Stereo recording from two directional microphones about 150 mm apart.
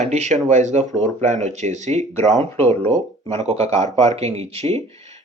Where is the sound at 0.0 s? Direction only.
50° right (ahead or behind).